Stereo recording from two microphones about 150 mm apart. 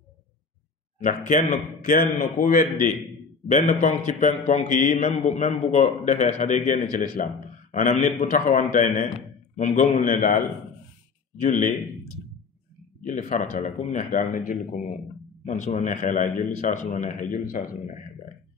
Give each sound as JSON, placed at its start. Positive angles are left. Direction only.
{"t": 0.9, "sound": "a man's voice", "side_deg": 55}
{"t": 13.0, "sound": "a man's voice", "side_deg": 60}